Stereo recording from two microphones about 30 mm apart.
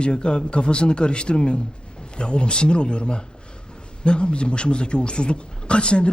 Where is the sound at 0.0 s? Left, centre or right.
Left.